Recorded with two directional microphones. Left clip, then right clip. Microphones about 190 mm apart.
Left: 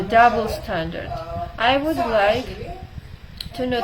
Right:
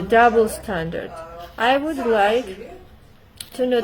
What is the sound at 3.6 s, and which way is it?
Speech, 55° right (ahead or behind).